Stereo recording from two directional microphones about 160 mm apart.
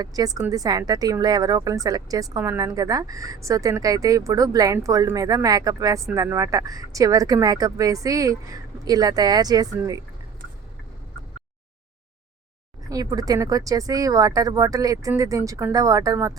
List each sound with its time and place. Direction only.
0.0 s speech: 25° right (ahead or behind)
12.9 s speech: 25° right (ahead or behind)